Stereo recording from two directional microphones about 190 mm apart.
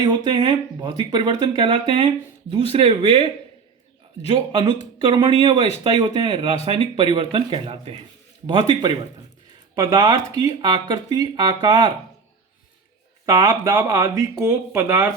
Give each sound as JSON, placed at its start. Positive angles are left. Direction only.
{"t": 0.0, "sound": "speech", "side_deg": -20}
{"t": 4.3, "sound": "speech", "side_deg": -30}
{"t": 9.7, "sound": "speech", "side_deg": -20}
{"t": 13.2, "sound": "speech", "side_deg": -15}